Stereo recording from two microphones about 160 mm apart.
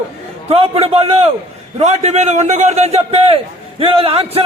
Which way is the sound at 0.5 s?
40° right (ahead or behind).